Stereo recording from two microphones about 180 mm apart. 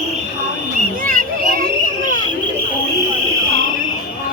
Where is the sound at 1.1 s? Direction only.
50° right (ahead or behind).